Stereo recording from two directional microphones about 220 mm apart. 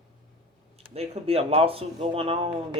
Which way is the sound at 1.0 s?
25° right (ahead or behind).